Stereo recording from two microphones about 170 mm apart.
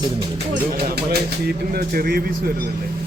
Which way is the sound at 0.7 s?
70° right (ahead or behind).